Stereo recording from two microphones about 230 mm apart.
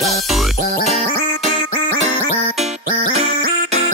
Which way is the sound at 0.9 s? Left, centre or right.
Right.